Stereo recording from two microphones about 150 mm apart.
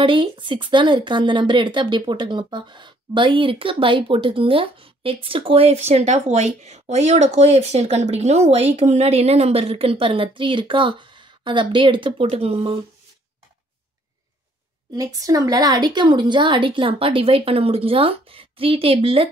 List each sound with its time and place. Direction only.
0.0 s a woman's voice: 35° right (ahead or behind)
15.0 s a woman's voice: 25° right (ahead or behind)